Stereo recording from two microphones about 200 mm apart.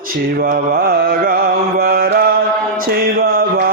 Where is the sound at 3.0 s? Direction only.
50° right (ahead or behind).